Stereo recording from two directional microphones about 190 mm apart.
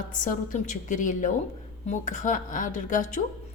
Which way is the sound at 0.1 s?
45° left (ahead or behind).